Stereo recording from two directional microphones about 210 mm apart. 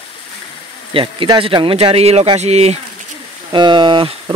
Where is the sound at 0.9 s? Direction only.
25° right (ahead or behind).